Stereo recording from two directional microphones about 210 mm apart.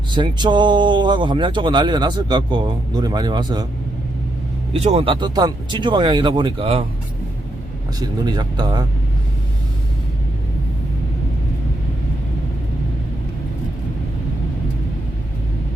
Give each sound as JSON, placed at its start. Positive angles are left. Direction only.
{"t": 0.1, "sound": "a man's voice", "side_deg": -20}
{"t": 4.7, "sound": "a man's voice", "side_deg": -30}
{"t": 7.9, "sound": "a man's voice", "side_deg": -20}